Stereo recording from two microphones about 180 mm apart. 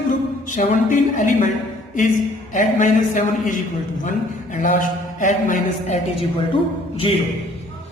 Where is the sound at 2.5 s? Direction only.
45° left (ahead or behind).